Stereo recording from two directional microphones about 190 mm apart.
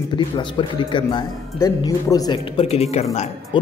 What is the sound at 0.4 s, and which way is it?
A man's voice, 25° left (ahead or behind).